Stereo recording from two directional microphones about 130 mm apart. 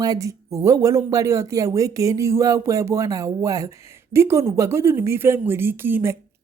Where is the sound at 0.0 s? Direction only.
25° right (ahead or behind).